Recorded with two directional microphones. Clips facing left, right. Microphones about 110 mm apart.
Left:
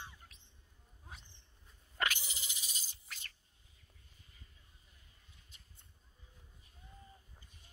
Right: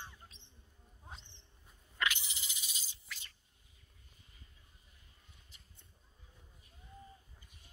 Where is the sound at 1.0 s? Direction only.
25° right (ahead or behind).